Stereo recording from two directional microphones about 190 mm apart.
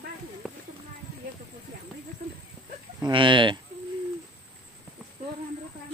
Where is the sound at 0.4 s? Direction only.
Centre (ahead or behind).